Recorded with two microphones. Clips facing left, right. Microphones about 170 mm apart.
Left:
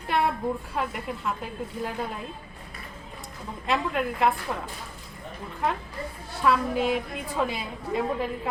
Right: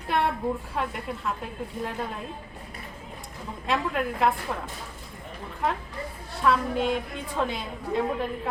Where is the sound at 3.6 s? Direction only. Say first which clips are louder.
Even; centre (ahead or behind).